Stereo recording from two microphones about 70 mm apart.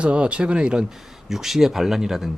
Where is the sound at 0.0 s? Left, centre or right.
Centre.